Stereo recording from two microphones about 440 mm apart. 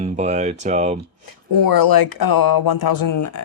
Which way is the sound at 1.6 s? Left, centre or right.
Left.